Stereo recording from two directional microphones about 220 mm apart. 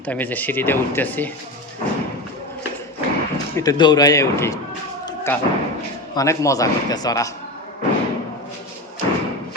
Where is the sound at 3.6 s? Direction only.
20° left (ahead or behind).